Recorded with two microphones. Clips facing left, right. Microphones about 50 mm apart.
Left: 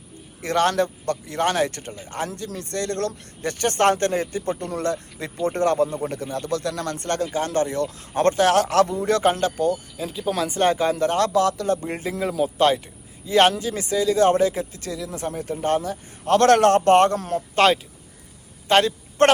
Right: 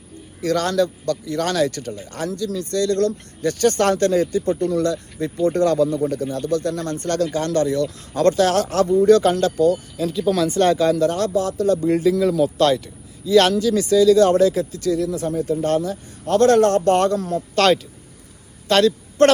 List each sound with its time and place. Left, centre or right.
0.4 s speech: left
7.3 s speech: left
9.7 s speech: centre
11.0 s speech: left
11.3 s speech: left
11.7 s speech: left
12.3 s speech: centre
15.9 s speech: left
18.7 s speech: left